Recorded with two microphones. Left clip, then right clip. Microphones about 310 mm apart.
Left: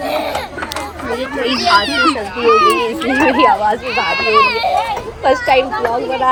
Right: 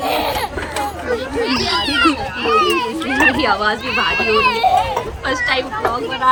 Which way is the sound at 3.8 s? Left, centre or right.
Centre.